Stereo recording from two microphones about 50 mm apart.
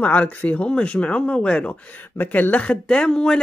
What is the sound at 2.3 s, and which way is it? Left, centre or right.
Speech, left.